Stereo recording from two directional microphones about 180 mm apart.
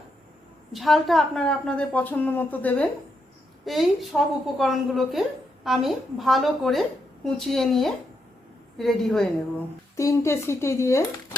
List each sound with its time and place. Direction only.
0.7 s a woman's voice: centre (ahead or behind)
10.0 s a woman's voice: 15° left (ahead or behind)